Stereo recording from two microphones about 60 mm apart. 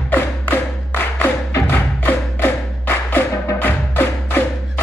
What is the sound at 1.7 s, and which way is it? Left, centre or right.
Music, left.